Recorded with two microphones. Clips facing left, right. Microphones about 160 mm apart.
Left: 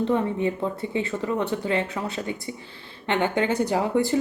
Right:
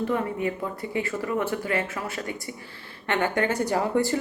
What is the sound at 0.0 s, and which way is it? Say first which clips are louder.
Speech: left 3 dB; 20° left (ahead or behind).